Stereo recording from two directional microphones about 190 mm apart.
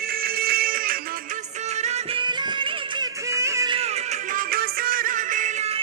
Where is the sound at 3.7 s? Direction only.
35° right (ahead or behind).